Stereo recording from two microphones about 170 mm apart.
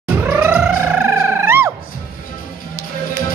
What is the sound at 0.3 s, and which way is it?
Music, 10° right (ahead or behind).